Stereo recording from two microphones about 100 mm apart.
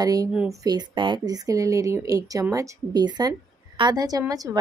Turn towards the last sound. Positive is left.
turn(degrees=-40)  # may be behind; listen again after turning